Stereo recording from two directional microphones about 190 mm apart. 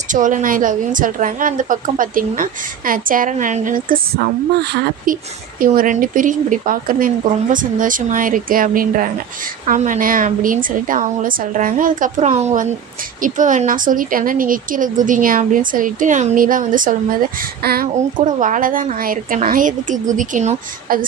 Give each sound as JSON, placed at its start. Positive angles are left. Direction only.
{"t": 0.1, "sound": "speech", "side_deg": -45}
{"t": 4.6, "sound": "speech", "side_deg": -60}
{"t": 5.5, "sound": "speech", "side_deg": -45}
{"t": 17.6, "sound": "speech", "side_deg": -55}
{"t": 18.3, "sound": "speech", "side_deg": -45}